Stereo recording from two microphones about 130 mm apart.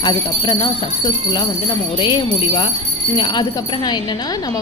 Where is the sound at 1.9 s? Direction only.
40° left (ahead or behind).